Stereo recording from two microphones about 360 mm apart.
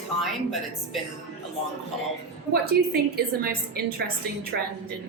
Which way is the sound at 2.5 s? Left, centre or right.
Right.